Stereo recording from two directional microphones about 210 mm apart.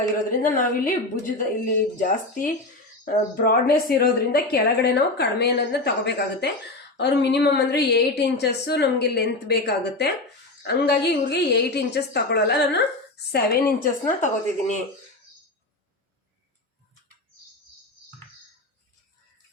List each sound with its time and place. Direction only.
0.3 s a woman's voice: 40° left (ahead or behind)